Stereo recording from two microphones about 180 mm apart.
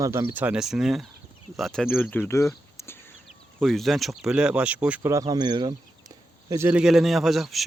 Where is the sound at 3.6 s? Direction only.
Centre (ahead or behind); by 5.7 s 25° right (ahead or behind).